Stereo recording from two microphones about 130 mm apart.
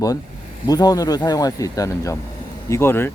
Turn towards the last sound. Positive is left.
turn(degrees=20)  # may be behind; listen again after turning